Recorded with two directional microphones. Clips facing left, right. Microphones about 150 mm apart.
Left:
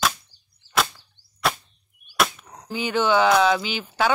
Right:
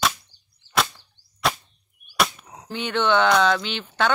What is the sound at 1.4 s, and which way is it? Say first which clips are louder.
Whip: even; centre (ahead or behind).